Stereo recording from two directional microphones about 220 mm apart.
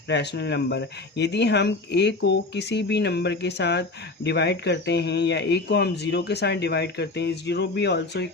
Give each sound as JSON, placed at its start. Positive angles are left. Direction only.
{"t": 0.1, "sound": "speech", "side_deg": 50}